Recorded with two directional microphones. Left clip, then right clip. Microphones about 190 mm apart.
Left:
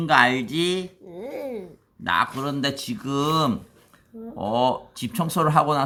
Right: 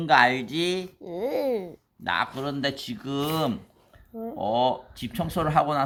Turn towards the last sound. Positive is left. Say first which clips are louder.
# left 3 dB
turn(degrees=10)  # may be behind; listen again after turning